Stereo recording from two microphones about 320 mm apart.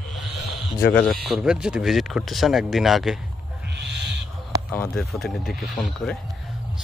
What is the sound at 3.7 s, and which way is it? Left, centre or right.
Owl, right.